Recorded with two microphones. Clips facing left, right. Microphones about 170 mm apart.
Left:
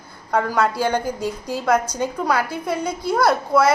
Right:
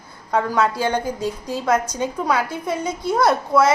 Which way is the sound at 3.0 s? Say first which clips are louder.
Right 1 dB; 20° right (ahead or behind).